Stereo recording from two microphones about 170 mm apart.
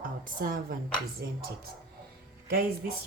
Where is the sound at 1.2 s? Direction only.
70° right (ahead or behind).